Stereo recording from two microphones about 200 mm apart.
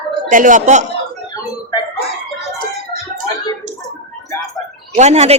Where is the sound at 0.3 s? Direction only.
40° right (ahead or behind).